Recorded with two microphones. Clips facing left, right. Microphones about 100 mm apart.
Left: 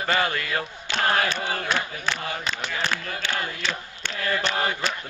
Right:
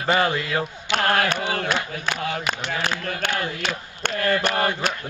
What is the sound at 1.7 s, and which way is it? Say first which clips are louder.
Speech: right 1 dB; 5° right (ahead or behind).